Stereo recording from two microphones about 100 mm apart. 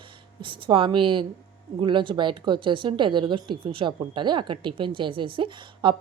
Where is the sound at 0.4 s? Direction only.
55° right (ahead or behind).